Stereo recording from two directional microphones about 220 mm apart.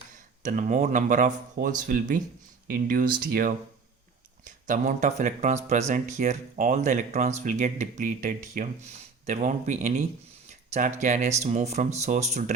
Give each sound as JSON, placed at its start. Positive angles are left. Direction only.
{"t": 0.4, "sound": "speech", "side_deg": -35}